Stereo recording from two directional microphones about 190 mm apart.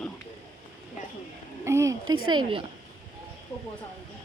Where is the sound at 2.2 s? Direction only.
25° right (ahead or behind).